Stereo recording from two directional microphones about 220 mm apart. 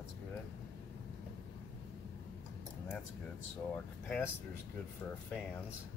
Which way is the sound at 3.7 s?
5° left (ahead or behind).